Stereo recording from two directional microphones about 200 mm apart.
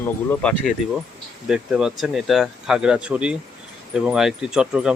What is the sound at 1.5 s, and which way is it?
Speech, 5° right (ahead or behind).